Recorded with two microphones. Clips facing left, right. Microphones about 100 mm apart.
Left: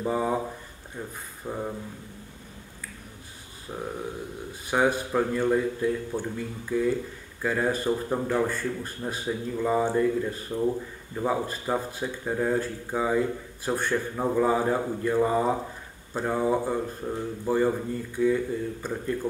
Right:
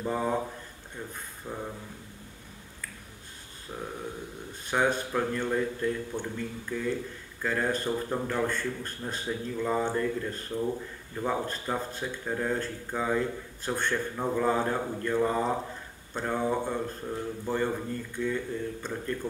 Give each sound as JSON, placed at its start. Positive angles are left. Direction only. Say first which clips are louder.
{"t": 0.0, "sound": "speech", "louder": "left 3 dB", "side_deg": 5}
{"t": 1.5, "sound": "speech", "louder": "left 5 dB", "side_deg": 15}
{"t": 4.6, "sound": "speech", "louder": "left 3 dB", "side_deg": 10}